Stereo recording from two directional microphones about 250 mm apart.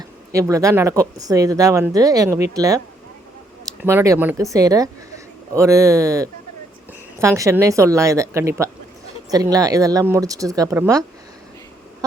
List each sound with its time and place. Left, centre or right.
0.3 s speech: centre
3.8 s speech: centre